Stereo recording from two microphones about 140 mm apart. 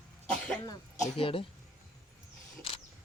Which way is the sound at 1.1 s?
40° left (ahead or behind).